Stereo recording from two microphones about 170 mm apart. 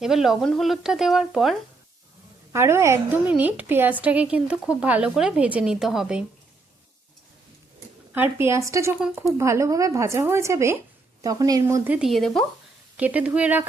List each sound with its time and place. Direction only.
0.0 s speech: centre (ahead or behind)
2.5 s speech: 15° right (ahead or behind)
8.1 s speech: 15° right (ahead or behind)
9.0 s speech: 5° right (ahead or behind)
9.2 s speech: 15° right (ahead or behind)
11.9 s speech: centre (ahead or behind)
13.0 s speech: 10° right (ahead or behind)